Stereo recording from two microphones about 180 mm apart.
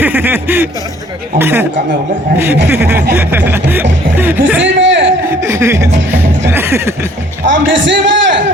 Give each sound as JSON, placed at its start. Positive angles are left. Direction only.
{"t": 0.0, "sound": "a sound", "side_deg": -10}
{"t": 1.4, "sound": "chuckle", "side_deg": -15}
{"t": 4.6, "sound": "a sound", "side_deg": -90}
{"t": 5.2, "sound": "speech", "side_deg": -15}
{"t": 6.5, "sound": "chuckle", "side_deg": -15}
{"t": 7.4, "sound": "a man's voice", "side_deg": -90}